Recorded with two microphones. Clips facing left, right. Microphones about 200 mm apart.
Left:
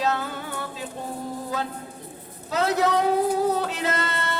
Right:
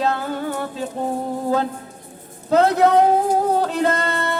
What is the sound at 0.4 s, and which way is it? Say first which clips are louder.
Music: right 8 dB; 45° right (ahead or behind).